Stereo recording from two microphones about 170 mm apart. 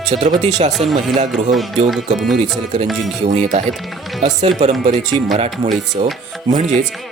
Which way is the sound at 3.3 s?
40° right (ahead or behind).